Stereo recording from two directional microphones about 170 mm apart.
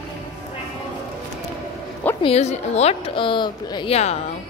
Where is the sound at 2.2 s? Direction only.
40° left (ahead or behind).